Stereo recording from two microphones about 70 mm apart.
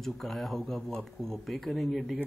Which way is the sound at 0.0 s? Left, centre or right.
Centre.